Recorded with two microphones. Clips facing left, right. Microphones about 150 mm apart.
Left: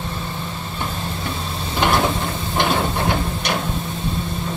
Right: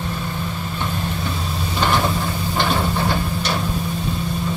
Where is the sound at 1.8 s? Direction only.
15° left (ahead or behind).